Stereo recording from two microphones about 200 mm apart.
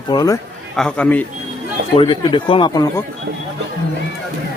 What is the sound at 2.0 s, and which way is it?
Speech, 25° left (ahead or behind).